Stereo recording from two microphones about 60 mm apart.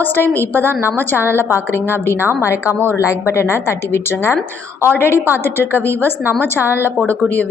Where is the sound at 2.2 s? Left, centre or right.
Right.